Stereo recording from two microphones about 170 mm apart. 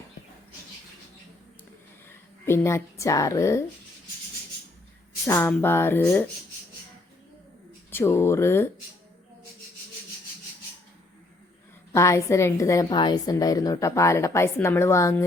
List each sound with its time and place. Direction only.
2.0 s a woman's voice: 15° left (ahead or behind)
5.2 s a woman's voice: 15° left (ahead or behind)
7.9 s a woman's voice: 15° left (ahead or behind)
11.9 s a woman's voice: 15° left (ahead or behind)